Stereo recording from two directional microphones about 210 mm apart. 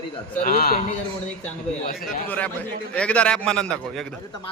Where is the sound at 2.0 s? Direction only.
5° left (ahead or behind).